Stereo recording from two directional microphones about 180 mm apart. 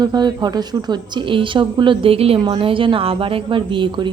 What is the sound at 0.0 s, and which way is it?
Speech, 25° right (ahead or behind).